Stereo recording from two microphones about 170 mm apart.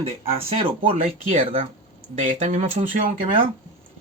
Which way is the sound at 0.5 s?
35° right (ahead or behind).